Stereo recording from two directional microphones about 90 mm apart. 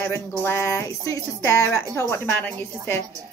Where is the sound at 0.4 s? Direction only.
30° left (ahead or behind).